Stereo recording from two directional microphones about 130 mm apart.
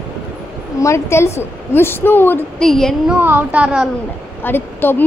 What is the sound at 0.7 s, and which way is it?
A woman's voice, 25° left (ahead or behind).